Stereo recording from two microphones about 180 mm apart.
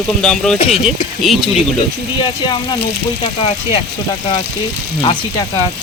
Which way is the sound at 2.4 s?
25° left (ahead or behind).